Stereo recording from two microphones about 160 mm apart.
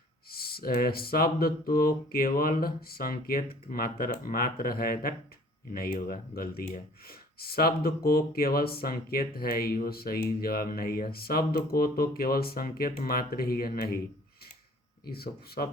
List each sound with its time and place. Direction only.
0.3 s speech: 70° left (ahead or behind)
15.0 s speech: 75° left (ahead or behind)